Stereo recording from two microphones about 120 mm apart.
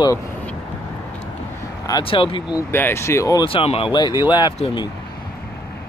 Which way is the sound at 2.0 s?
50° left (ahead or behind).